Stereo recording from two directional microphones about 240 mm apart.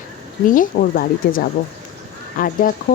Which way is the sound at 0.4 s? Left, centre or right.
Left.